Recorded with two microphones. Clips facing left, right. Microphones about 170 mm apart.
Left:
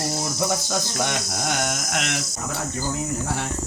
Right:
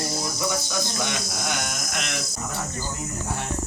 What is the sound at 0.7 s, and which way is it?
Mantra, 60° left (ahead or behind).